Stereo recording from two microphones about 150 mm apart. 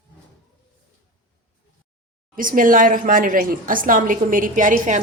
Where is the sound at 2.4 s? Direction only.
65° right (ahead or behind).